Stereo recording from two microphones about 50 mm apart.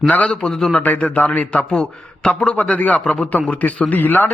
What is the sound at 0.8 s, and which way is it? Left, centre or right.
Speech, left.